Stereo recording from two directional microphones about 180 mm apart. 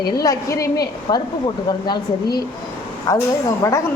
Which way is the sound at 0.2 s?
20° left (ahead or behind).